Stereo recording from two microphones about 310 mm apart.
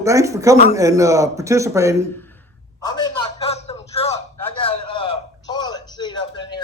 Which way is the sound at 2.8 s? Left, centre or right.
Centre.